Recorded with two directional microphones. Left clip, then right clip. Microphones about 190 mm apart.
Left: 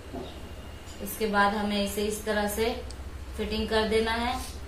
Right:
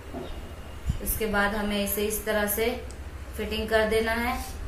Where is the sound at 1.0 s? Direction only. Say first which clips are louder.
Left 1 dB; centre (ahead or behind).